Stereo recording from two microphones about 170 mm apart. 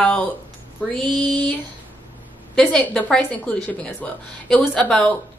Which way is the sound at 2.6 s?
10° left (ahead or behind).